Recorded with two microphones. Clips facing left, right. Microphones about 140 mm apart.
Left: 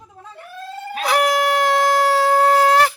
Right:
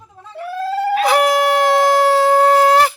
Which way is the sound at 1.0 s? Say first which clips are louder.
Right 2 dB; centre (ahead or behind).